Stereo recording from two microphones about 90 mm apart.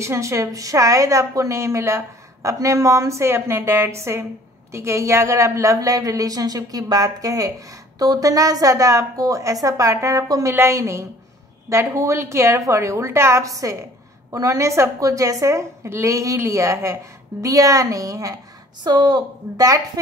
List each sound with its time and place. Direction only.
0.0 s a woman's voice: 30° right (ahead or behind)
18.9 s a woman's voice: 50° right (ahead or behind)